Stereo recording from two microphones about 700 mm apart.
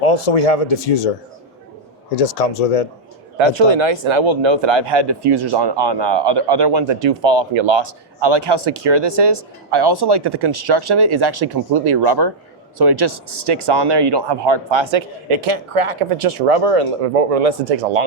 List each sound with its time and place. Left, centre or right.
0.0 s speech: left
2.1 s speech: left
3.3 s speech: right